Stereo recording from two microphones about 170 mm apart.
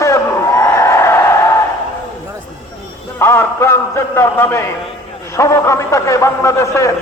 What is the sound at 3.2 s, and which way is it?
Speech, 15° left (ahead or behind).